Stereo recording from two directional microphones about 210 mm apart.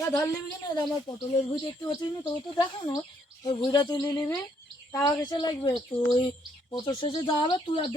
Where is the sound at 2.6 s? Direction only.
20° left (ahead or behind).